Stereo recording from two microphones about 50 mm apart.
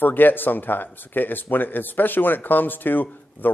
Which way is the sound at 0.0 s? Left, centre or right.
Left.